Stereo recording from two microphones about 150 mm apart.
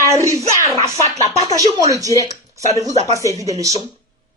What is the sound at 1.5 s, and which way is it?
Speech, 20° right (ahead or behind).